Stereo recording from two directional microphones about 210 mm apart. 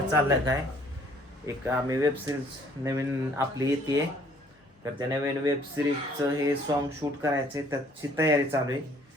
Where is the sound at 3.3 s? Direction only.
15° right (ahead or behind).